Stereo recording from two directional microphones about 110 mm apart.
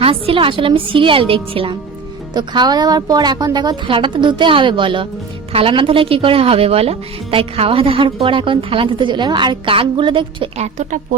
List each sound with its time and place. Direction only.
0.0 s a woman's voice: 55° right (ahead or behind)
2.3 s a woman's voice: 40° right (ahead or behind)